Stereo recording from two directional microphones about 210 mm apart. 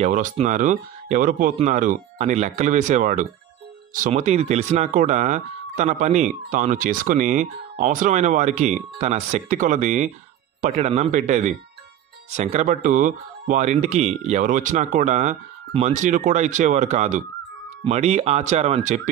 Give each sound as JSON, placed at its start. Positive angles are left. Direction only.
{"t": 0.0, "sound": "speech", "side_deg": -35}